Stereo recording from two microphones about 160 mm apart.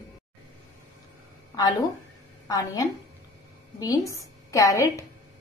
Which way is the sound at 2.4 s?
25° left (ahead or behind).